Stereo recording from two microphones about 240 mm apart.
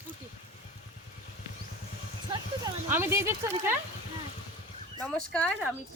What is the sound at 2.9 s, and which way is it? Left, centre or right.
Speech, centre.